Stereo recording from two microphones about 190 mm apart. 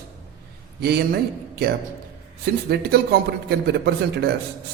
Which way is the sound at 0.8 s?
55° right (ahead or behind).